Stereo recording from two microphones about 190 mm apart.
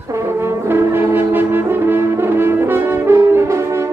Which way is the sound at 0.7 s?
10° right (ahead or behind).